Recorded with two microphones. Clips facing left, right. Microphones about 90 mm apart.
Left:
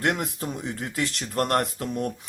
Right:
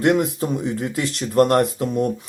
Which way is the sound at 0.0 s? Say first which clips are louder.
Right 8 dB; 20° right (ahead or behind).